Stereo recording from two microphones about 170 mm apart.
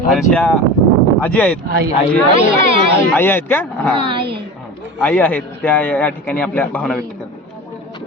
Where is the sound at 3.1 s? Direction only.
10° left (ahead or behind).